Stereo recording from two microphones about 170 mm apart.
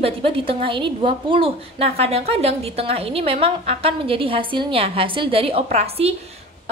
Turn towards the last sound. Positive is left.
turn(degrees=-35)  # may be behind; listen again after turning